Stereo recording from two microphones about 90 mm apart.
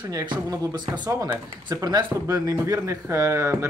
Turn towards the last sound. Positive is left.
turn(degrees=-30)  # may be behind; listen again after turning